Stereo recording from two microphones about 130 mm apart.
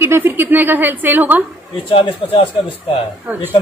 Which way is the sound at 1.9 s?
40° left (ahead or behind).